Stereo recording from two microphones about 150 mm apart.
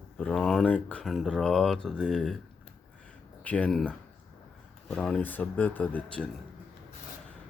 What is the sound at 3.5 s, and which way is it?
Speech, 10° left (ahead or behind).